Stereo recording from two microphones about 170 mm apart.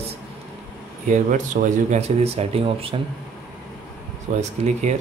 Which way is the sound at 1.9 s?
35° right (ahead or behind).